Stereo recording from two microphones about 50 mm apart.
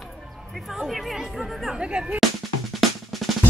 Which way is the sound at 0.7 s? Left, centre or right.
Centre.